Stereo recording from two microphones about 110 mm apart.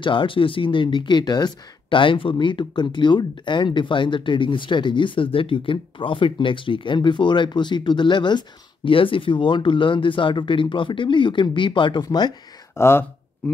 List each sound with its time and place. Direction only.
0.0 s speech: 50° left (ahead or behind)
12.7 s speech: 25° left (ahead or behind)